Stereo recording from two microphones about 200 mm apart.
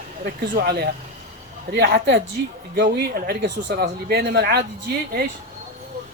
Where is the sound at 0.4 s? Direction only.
55° right (ahead or behind).